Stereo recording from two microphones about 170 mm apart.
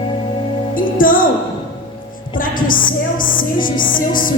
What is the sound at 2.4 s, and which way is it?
Music, 55° left (ahead or behind).